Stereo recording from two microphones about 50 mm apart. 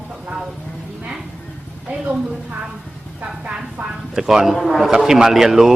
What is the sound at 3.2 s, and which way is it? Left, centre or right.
Speech, right.